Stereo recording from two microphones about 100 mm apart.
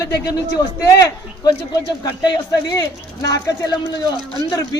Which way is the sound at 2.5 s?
40° left (ahead or behind).